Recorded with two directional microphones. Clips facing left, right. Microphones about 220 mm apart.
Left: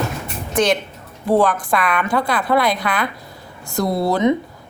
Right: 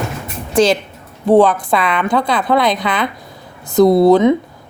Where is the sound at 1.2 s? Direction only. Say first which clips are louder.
Right 6 dB; 25° right (ahead or behind).